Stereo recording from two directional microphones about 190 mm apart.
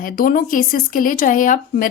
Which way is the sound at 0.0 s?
45° left (ahead or behind).